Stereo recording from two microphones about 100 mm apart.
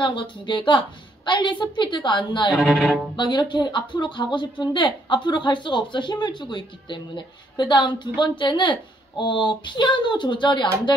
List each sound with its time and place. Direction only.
0.0 s a woman's voice: 55° left (ahead or behind)
2.5 s speech: centre (ahead or behind)
3.2 s a woman's voice: 50° left (ahead or behind)